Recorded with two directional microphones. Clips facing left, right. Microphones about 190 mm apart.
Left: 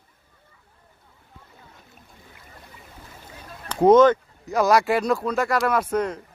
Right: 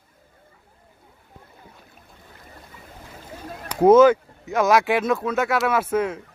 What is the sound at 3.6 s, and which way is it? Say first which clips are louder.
Speech: right 1 dB; 5° right (ahead or behind).